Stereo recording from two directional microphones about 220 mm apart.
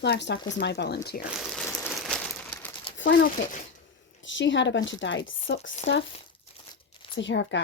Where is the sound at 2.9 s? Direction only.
55° left (ahead or behind).